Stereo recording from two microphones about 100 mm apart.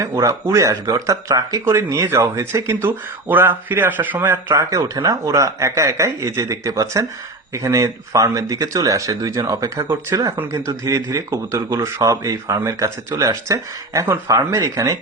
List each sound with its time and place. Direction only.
0.0 s speech: 30° right (ahead or behind)